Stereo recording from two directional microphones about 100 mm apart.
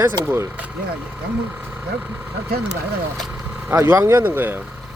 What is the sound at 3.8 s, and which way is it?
Speech, 30° right (ahead or behind).